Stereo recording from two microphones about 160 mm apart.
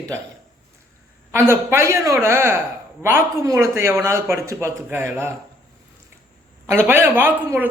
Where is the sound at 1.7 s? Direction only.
15° right (ahead or behind).